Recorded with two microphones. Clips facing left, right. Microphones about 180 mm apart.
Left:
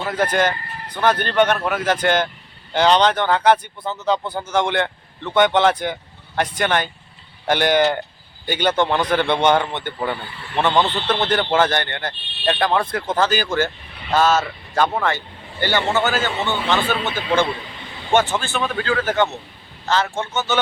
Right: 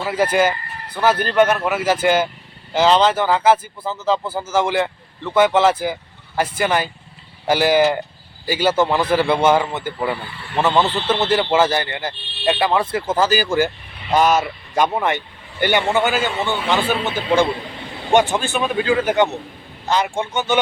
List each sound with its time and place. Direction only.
0.0 s speech: 5° right (ahead or behind)